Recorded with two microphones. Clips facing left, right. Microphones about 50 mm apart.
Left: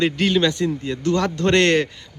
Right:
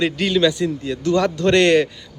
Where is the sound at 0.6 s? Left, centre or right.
Left.